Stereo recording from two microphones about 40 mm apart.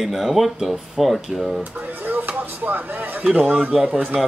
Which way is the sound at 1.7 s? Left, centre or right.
Right.